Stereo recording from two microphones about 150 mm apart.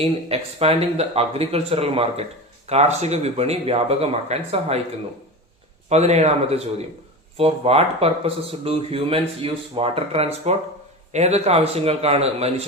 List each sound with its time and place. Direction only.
0.0 s speech: 40° right (ahead or behind)
5.9 s speech: 45° right (ahead or behind)